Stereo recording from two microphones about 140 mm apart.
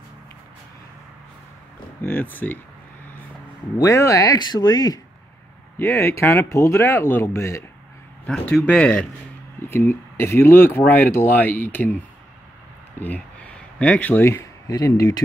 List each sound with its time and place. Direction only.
2.0 s speech: 15° left (ahead or behind)
3.7 s speech: 20° left (ahead or behind)
5.8 s speech: 15° left (ahead or behind)
8.3 s speech: 5° left (ahead or behind)
13.0 s speech: 10° left (ahead or behind)